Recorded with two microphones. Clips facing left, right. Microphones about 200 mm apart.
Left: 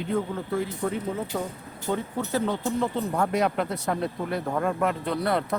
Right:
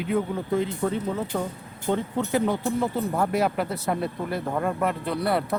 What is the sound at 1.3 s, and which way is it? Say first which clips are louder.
Speech: right 2 dB; 45° right (ahead or behind).